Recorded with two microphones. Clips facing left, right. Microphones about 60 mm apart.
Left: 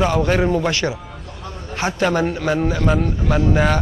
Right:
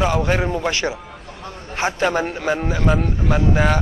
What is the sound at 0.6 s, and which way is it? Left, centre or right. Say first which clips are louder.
A man's voice: left 1 dB; right.